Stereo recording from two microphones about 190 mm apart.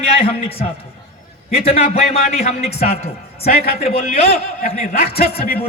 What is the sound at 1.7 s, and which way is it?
A man's voice, 35° left (ahead or behind).